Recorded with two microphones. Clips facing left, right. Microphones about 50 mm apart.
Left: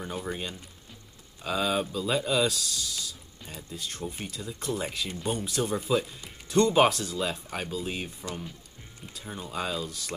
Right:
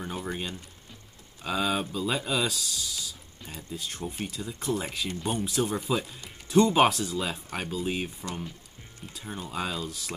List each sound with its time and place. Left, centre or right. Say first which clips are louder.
0.0 s music: even; centre
1.4 s speech: even; centre